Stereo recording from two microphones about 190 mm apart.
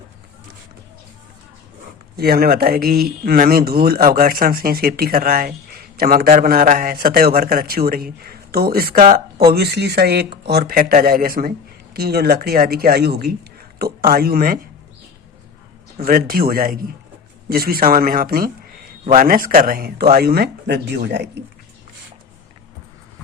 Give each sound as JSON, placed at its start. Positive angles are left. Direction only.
{"t": 2.1, "sound": "speech", "side_deg": -55}
{"t": 16.0, "sound": "speech", "side_deg": -50}